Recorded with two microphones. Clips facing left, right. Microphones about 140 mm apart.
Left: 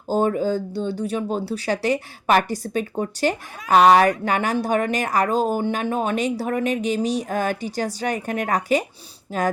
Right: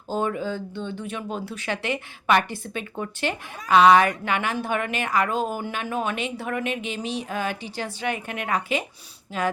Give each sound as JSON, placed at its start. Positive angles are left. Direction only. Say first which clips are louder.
{"t": 0.1, "sound": "speech", "louder": "left 6 dB", "side_deg": 40}